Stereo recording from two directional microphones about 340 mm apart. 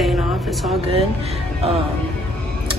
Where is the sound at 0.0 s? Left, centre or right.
Centre.